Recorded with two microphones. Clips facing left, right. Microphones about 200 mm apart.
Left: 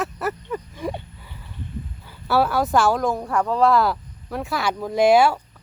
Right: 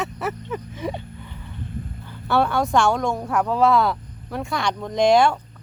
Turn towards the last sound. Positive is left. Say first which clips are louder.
# left 1 dB
turn(degrees=5)  # may be behind; listen again after turning